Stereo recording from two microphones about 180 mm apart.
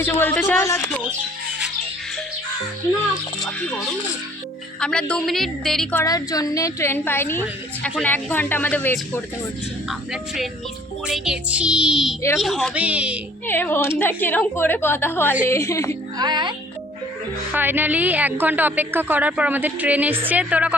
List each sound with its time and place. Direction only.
0.0 s a woman's voice: 10° left (ahead or behind)
4.8 s a woman's voice: 5° left (ahead or behind)
6.1 s a woman's voice: 20° left (ahead or behind)
10.1 s a woman's voice: centre (ahead or behind)
13.5 s a woman's voice: 10° left (ahead or behind)
16.1 s speech: 25° right (ahead or behind)
17.5 s a woman's voice: 10° right (ahead or behind)